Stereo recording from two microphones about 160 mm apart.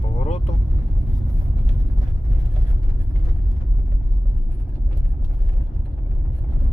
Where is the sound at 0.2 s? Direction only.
40° left (ahead or behind).